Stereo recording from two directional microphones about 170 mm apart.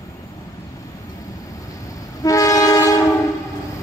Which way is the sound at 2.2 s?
20° left (ahead or behind).